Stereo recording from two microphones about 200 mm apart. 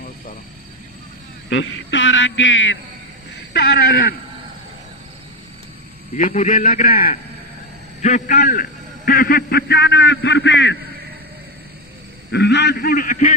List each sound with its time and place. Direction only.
1.5 s a man's voice: 70° left (ahead or behind)
3.5 s a man's voice: 55° left (ahead or behind)
6.1 s a man's voice: 40° left (ahead or behind); by 10.8 s 65° left (ahead or behind)
12.3 s a man's voice: 55° left (ahead or behind)